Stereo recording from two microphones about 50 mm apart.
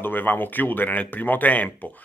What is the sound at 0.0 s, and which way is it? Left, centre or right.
Speech, left.